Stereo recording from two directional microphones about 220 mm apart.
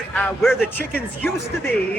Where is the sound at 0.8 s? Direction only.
45° left (ahead or behind).